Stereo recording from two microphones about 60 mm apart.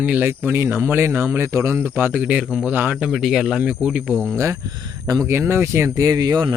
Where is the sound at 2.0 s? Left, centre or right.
Right.